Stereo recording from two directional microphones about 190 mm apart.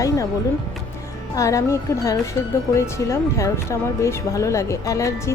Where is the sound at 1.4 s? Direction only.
15° left (ahead or behind).